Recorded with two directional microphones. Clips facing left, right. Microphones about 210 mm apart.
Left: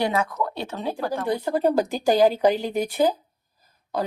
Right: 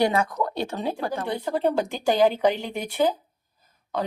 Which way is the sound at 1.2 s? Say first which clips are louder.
Left 3 dB; 40° left (ahead or behind).